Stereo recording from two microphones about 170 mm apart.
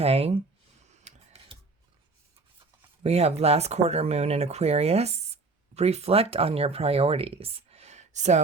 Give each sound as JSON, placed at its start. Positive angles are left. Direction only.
{"t": 0.0, "sound": "speech", "side_deg": -35}
{"t": 1.0, "sound": "a sound", "side_deg": -35}
{"t": 3.0, "sound": "speech", "side_deg": -40}